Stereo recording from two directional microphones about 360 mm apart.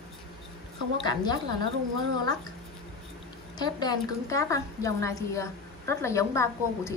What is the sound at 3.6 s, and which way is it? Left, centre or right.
A woman's voice, centre.